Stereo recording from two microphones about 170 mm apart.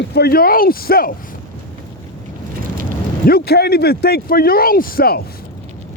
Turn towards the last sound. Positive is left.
turn(degrees=60)  # may be behind; listen again after turning